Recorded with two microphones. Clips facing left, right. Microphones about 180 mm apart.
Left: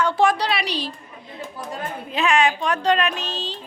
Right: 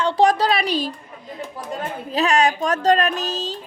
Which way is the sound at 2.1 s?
40° right (ahead or behind).